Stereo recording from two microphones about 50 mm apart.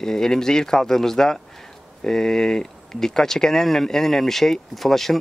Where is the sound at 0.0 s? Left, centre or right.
Centre.